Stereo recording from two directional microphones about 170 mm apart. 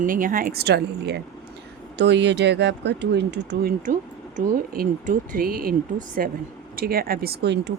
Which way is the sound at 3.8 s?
50° right (ahead or behind).